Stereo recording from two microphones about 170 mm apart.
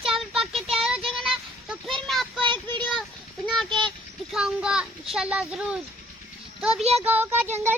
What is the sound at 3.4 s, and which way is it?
Speech, 5° left (ahead or behind).